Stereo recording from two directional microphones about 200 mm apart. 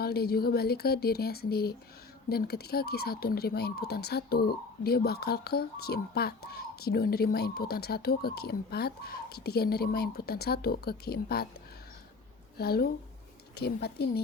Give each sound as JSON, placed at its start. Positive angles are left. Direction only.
{"t": 0.0, "sound": "speech", "side_deg": 50}
{"t": 12.5, "sound": "speech", "side_deg": 50}